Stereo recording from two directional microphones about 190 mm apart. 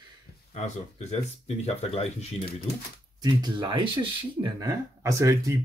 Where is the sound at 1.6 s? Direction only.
35° left (ahead or behind).